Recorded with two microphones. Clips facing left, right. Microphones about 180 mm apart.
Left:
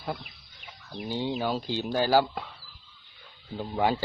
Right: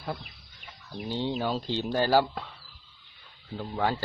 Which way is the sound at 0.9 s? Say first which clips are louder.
Even; 5° left (ahead or behind).